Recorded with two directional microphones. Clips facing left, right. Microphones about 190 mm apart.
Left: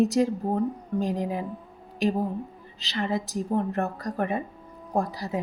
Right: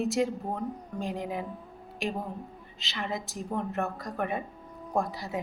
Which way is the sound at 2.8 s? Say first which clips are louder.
Left 7 dB; 35° left (ahead or behind).